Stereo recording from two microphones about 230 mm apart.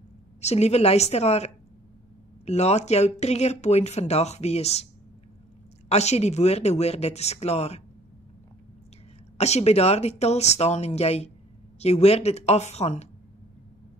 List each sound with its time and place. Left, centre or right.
0.4 s speech: left
5.9 s speech: left
9.4 s speech: left